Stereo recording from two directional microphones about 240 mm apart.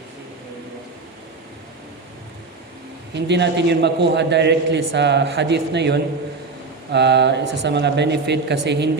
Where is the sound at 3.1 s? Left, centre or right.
Right.